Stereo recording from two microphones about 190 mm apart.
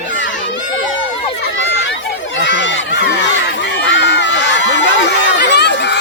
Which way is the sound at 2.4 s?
75° left (ahead or behind).